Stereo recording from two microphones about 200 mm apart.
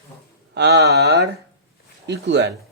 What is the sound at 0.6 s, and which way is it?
Speech, 55° right (ahead or behind).